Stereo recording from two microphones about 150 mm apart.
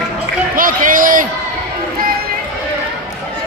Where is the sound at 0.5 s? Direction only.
65° right (ahead or behind).